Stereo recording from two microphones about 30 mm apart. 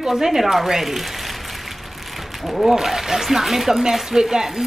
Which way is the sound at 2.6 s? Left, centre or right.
Centre.